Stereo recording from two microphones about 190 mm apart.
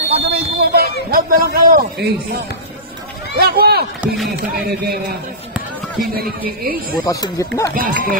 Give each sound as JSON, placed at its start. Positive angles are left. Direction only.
{"t": 0.1, "sound": "a sound", "side_deg": -55}
{"t": 1.1, "sound": "a man's voice", "side_deg": -50}
{"t": 3.3, "sound": "speech", "side_deg": -55}
{"t": 4.0, "sound": "speech", "side_deg": 0}
{"t": 4.4, "sound": "speech", "side_deg": -55}
{"t": 6.6, "sound": "speech", "side_deg": -50}
{"t": 7.1, "sound": "speech", "side_deg": 20}
{"t": 7.7, "sound": "speech", "side_deg": -50}